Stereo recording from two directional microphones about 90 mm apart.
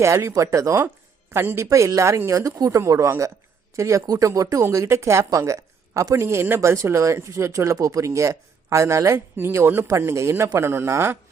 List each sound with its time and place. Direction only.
0.0 s a woman's voice: 30° right (ahead or behind)